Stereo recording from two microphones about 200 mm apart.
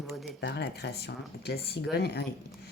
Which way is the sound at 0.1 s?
Centre (ahead or behind).